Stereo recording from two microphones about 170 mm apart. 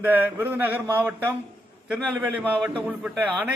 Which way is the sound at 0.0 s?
10° right (ahead or behind).